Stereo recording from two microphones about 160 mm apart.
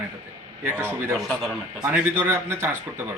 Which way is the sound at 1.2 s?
Centre (ahead or behind).